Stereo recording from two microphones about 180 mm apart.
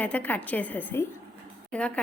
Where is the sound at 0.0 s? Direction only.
10° left (ahead or behind).